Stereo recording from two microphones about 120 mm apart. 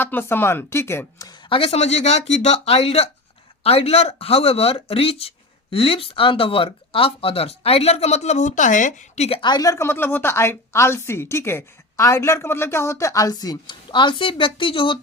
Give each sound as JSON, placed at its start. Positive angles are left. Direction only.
{"t": 0.0, "sound": "speech", "side_deg": 20}
{"t": 1.3, "sound": "speech", "side_deg": 45}
{"t": 9.4, "sound": "speech", "side_deg": 35}